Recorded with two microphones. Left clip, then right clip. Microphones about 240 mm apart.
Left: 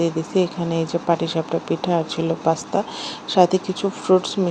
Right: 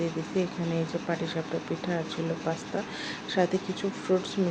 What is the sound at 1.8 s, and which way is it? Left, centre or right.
Speech, centre.